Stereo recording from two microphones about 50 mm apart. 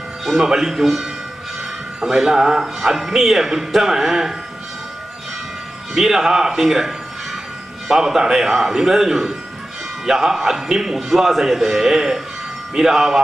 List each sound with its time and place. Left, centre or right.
0.2 s speech: centre
5.9 s speech: centre
7.9 s speech: centre